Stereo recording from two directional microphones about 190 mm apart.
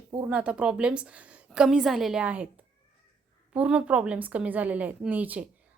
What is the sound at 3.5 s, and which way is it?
A woman's voice, 5° right (ahead or behind).